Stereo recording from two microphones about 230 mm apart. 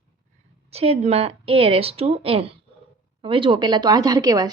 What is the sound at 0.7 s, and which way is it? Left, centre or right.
A woman's voice, right.